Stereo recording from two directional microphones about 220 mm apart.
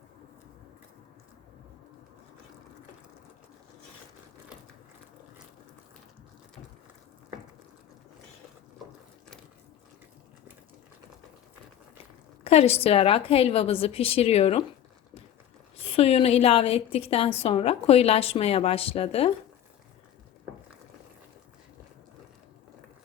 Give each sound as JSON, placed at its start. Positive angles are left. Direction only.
{"t": 12.5, "sound": "a woman's voice", "side_deg": 30}
{"t": 15.9, "sound": "a woman's voice", "side_deg": 25}